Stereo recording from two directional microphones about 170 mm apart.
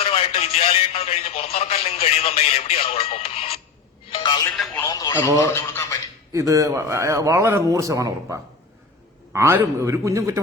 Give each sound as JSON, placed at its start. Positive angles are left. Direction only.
{"t": 0.0, "sound": "speech", "side_deg": 35}
{"t": 4.1, "sound": "telephone", "side_deg": 25}
{"t": 4.5, "sound": "speech", "side_deg": 0}
{"t": 4.8, "sound": "speech", "side_deg": 20}
{"t": 6.3, "sound": "a man's voice", "side_deg": -20}